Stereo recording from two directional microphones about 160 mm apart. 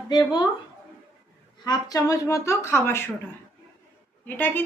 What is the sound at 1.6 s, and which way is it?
A woman's voice, 25° left (ahead or behind).